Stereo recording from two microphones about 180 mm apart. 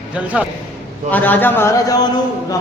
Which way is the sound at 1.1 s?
10° left (ahead or behind).